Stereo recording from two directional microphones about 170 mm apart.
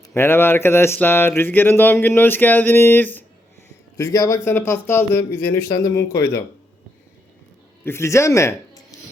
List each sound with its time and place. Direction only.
0.1 s speech: 15° left (ahead or behind)
7.9 s speech: 15° left (ahead or behind)